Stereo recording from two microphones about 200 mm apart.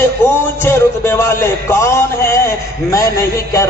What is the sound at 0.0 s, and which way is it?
A man's voice, 10° left (ahead or behind).